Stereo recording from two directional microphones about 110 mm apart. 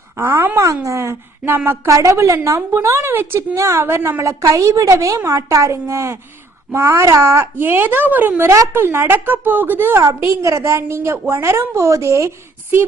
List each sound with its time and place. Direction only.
0.2 s a child's voice: 25° right (ahead or behind)